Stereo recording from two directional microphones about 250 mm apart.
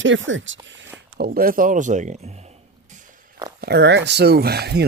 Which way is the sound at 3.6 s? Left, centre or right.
Right.